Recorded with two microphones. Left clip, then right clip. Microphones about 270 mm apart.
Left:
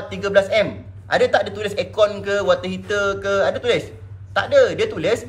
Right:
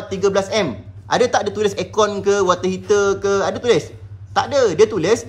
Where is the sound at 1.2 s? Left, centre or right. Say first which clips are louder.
Right 1 dB; right.